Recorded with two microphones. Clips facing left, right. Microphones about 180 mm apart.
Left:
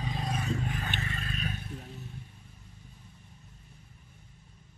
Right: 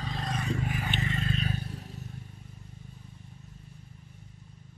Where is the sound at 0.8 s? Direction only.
20° right (ahead or behind).